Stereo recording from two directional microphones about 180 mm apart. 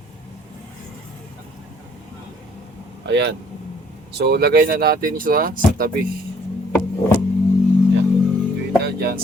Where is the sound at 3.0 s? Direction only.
75° right (ahead or behind); by 5.8 s 55° right (ahead or behind).